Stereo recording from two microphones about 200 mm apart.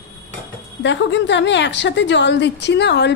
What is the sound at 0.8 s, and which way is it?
A woman's voice, 60° left (ahead or behind).